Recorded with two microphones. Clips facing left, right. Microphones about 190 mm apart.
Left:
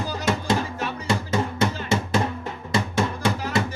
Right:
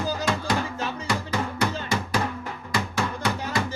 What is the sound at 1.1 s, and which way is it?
Drum, 25° left (ahead or behind).